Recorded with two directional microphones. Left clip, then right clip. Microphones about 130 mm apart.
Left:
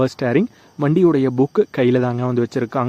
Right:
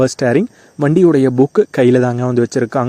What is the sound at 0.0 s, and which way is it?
Speech, 35° right (ahead or behind).